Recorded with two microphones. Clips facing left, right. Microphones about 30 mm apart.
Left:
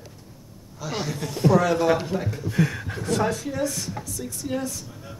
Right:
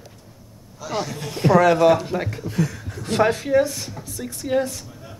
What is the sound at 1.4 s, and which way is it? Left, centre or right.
Speech, right.